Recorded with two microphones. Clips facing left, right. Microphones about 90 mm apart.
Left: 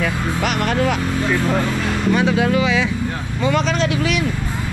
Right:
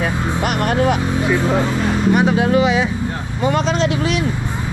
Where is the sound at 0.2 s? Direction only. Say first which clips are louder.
Right 1 dB; 20° right (ahead or behind).